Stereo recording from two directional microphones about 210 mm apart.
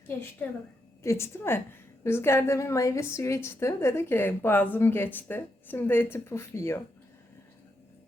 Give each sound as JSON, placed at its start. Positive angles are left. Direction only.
{"t": 0.4, "sound": "a woman's voice", "side_deg": 5}